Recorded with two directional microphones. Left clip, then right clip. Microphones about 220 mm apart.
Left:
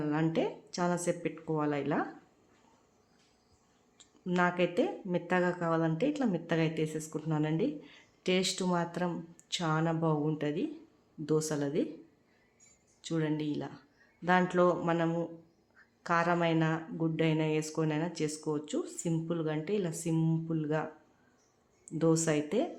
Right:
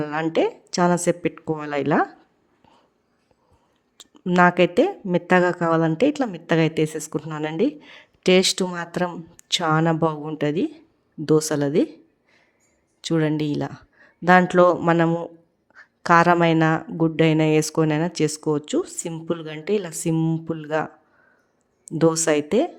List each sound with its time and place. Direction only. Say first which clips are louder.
0.0 s speech: right 10 dB; 50° right (ahead or behind)
3.9 s speech: right 13 dB; 45° right (ahead or behind)
13.0 s speech: right 12 dB; 45° right (ahead or behind)
21.8 s speech: right 10 dB; 45° right (ahead or behind)